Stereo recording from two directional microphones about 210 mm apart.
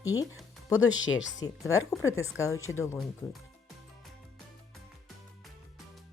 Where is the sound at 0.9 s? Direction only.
65° left (ahead or behind).